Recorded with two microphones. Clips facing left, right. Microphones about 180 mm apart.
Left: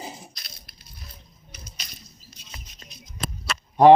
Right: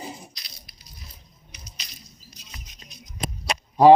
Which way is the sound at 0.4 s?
50° left (ahead or behind).